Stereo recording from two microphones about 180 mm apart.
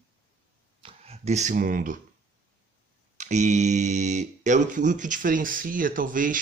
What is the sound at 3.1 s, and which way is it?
Speech, 40° right (ahead or behind).